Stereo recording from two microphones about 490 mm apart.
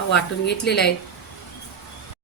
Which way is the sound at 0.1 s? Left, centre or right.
Left.